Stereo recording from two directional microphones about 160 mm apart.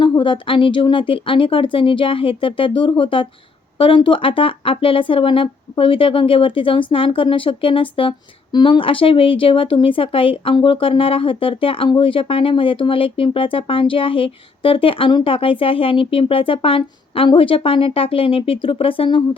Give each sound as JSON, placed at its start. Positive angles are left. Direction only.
{"t": 0.0, "sound": "speech", "side_deg": 30}